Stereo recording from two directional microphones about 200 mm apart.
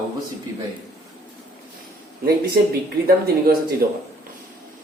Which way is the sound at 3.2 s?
50° right (ahead or behind).